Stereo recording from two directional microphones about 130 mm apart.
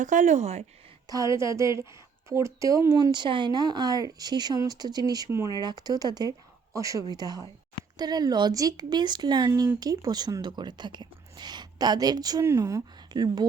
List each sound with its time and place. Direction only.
0.0 s speech: 75° right (ahead or behind)
1.0 s speech: 25° right (ahead or behind)